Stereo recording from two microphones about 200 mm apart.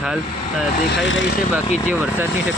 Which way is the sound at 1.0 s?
70° left (ahead or behind).